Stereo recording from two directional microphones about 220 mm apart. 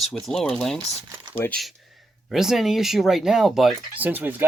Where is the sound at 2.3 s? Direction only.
Centre (ahead or behind).